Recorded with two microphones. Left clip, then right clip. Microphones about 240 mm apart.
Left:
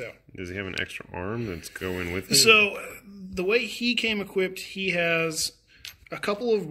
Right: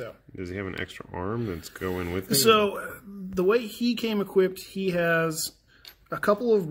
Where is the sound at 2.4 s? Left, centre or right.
Right.